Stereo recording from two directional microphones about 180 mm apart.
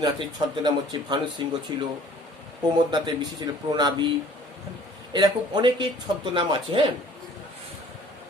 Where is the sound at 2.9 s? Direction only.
25° right (ahead or behind).